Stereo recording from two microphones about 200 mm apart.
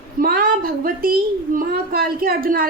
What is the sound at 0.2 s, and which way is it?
A woman's voice, 45° right (ahead or behind).